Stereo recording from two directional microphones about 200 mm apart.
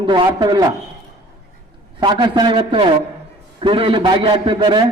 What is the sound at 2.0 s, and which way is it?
A man's voice, 20° right (ahead or behind).